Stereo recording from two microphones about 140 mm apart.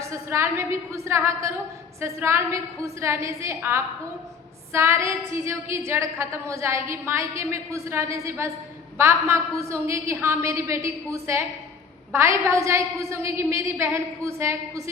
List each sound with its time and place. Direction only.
0.0 s a woman's voice: 20° right (ahead or behind)